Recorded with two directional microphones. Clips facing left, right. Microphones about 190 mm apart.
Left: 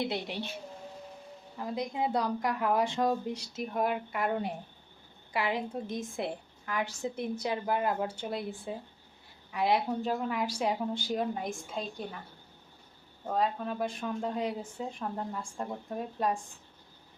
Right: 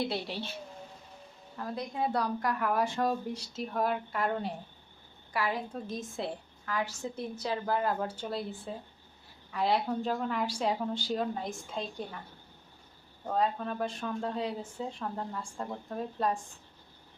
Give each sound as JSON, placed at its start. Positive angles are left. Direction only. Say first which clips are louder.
{"t": 0.0, "sound": "a woman's voice", "louder": "even", "side_deg": 20}
{"t": 1.5, "sound": "a woman's voice", "louder": "left 2 dB", "side_deg": 15}
{"t": 13.2, "sound": "speech", "louder": "even", "side_deg": 5}